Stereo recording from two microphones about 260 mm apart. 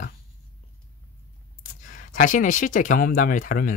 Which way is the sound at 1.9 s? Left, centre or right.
Left.